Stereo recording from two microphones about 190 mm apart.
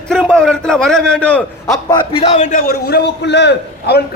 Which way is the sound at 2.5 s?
50° left (ahead or behind).